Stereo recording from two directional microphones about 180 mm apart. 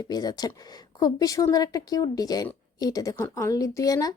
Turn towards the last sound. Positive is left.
turn(degrees=20)  # may be behind; listen again after turning